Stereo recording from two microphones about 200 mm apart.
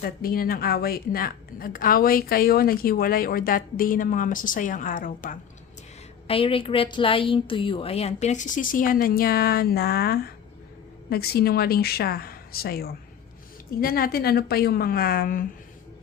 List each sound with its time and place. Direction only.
0.0 s a woman's voice: 45° left (ahead or behind)
6.2 s a woman's voice: 25° left (ahead or behind); by 15.4 s 45° left (ahead or behind)